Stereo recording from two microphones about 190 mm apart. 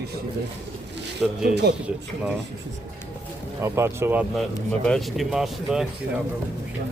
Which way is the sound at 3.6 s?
15° right (ahead or behind).